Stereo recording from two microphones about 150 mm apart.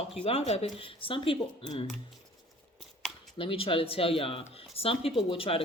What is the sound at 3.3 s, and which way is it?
Speech, 35° left (ahead or behind).